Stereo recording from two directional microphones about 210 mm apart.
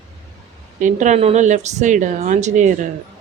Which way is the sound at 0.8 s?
35° right (ahead or behind).